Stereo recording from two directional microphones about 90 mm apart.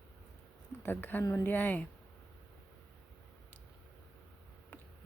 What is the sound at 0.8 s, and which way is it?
Speech, 25° left (ahead or behind).